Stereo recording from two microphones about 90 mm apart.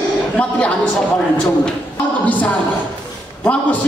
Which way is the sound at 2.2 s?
15° left (ahead or behind).